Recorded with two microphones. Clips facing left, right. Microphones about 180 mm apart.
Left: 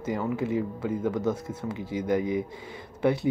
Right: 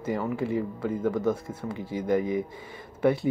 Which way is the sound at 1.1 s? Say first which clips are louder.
Right 1 dB; 25° right (ahead or behind).